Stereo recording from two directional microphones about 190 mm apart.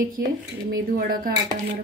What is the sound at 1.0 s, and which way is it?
Speech, 50° right (ahead or behind).